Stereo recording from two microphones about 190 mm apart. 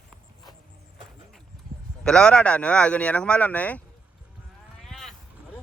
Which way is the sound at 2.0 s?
5° left (ahead or behind).